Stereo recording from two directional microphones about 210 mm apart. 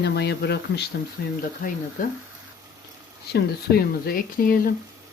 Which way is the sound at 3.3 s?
45° left (ahead or behind).